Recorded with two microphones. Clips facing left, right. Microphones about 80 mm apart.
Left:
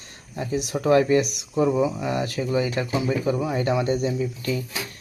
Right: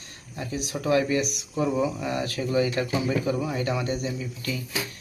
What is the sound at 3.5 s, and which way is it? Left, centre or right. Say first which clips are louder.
Speech: left 5 dB; left.